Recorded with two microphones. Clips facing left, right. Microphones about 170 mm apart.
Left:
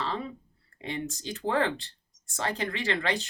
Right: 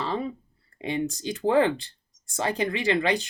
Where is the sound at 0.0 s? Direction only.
15° right (ahead or behind).